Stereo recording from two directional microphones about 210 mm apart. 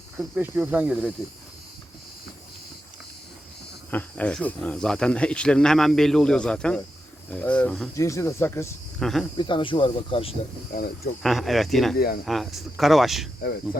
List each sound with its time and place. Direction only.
0.2 s speech: 10° right (ahead or behind)
3.9 s speech: 5° left (ahead or behind)
9.4 s speech: 25° left (ahead or behind)
10.7 s speech: 40° left (ahead or behind)
11.2 s speech: centre (ahead or behind)
11.9 s speech: 45° left (ahead or behind)
12.2 s speech: centre (ahead or behind)